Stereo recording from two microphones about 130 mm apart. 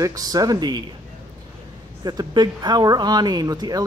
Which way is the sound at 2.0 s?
30° right (ahead or behind).